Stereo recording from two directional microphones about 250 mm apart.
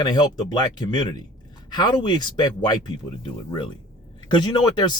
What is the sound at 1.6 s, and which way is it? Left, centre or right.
Speech, centre.